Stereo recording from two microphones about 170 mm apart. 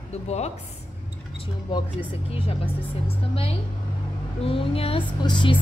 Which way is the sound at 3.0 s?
35° left (ahead or behind).